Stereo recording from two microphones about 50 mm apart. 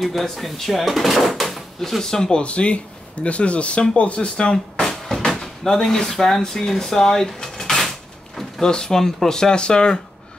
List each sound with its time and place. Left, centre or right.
0.0 s speech: centre
2.4 s speech: left
4.8 s music: centre
5.4 s speech: centre
7.5 s a sound: centre
8.4 s speech: centre